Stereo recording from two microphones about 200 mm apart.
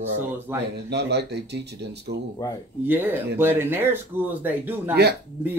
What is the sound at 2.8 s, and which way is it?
Speech, 10° right (ahead or behind).